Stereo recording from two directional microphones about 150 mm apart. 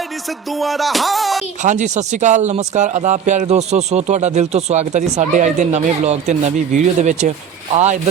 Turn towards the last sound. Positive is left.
turn(degrees=-50)  # may be behind; listen again after turning